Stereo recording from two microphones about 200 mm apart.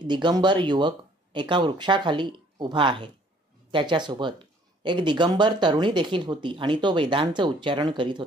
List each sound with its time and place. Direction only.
0.0 s speech: 20° right (ahead or behind)